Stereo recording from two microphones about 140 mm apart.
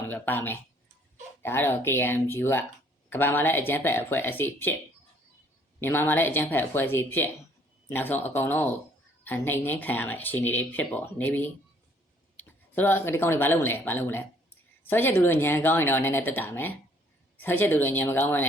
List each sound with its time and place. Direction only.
0.1 s speech: 15° left (ahead or behind)
5.8 s speech: 15° left (ahead or behind)